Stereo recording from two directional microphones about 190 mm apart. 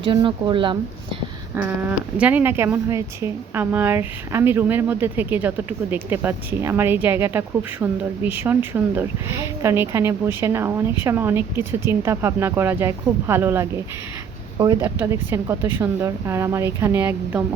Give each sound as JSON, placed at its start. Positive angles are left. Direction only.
{"t": 0.0, "sound": "speech", "side_deg": -25}
{"t": 1.5, "sound": "speech", "side_deg": -10}